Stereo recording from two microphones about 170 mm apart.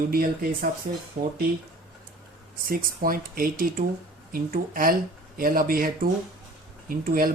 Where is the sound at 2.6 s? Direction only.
55° right (ahead or behind).